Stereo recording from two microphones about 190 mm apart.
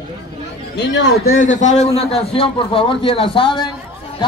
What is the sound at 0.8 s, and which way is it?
Speech, 65° left (ahead or behind).